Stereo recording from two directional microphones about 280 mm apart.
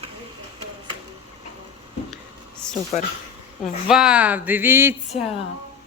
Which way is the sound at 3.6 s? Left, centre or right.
Centre.